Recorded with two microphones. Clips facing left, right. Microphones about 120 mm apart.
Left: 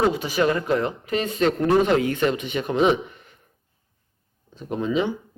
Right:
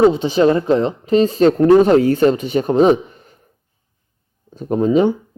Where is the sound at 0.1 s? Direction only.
25° right (ahead or behind).